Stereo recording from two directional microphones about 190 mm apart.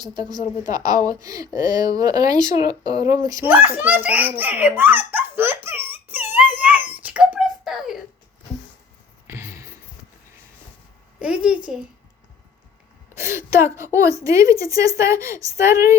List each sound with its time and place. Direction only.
0.7 s a child's voice: 20° right (ahead or behind)
5.6 s wail: 10° right (ahead or behind)
9.2 s a sound: 15° right (ahead or behind)
11.2 s a woman's voice: 5° right (ahead or behind)
13.1 s a woman's voice: 15° right (ahead or behind)